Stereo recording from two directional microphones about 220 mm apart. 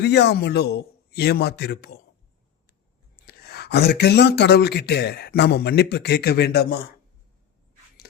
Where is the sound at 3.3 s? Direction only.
45° left (ahead or behind).